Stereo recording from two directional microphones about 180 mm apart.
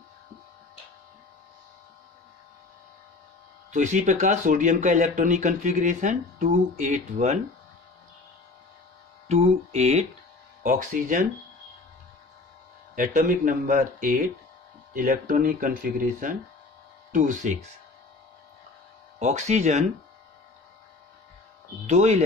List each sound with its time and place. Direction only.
3.7 s speech: 45° right (ahead or behind)
9.3 s mantra: 35° right (ahead or behind)
10.6 s speech: 50° right (ahead or behind)
12.9 s speech: 50° right (ahead or behind)
19.1 s mantra: 40° right (ahead or behind)
21.8 s mantra: 40° right (ahead or behind)